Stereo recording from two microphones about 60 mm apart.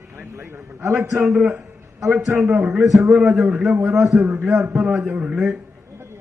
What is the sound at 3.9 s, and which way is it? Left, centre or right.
Speech, right.